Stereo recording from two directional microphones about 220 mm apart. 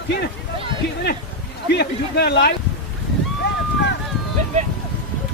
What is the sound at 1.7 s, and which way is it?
Speech, 50° left (ahead or behind).